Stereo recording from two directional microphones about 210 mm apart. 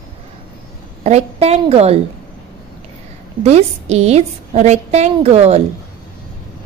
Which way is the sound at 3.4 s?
30° right (ahead or behind).